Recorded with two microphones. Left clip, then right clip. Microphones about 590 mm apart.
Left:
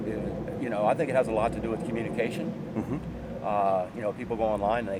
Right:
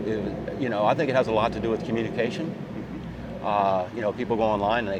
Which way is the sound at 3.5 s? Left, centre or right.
Right.